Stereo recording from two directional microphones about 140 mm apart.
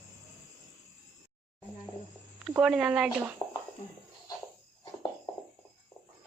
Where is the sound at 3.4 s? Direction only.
30° left (ahead or behind).